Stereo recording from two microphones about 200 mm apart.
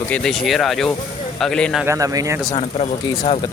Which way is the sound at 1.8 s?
15° right (ahead or behind).